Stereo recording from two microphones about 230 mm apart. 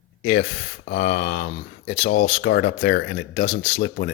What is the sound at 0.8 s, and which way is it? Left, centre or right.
Speech, left.